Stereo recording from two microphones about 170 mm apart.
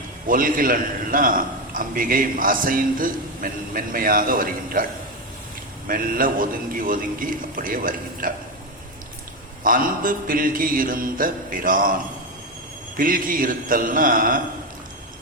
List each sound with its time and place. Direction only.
0.3 s a man's voice: 55° right (ahead or behind)
5.9 s a man's voice: 55° right (ahead or behind)
9.6 s a man's voice: 55° right (ahead or behind)
13.0 s a man's voice: 55° right (ahead or behind)